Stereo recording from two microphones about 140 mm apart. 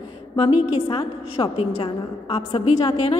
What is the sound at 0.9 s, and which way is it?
A woman's voice, 40° left (ahead or behind).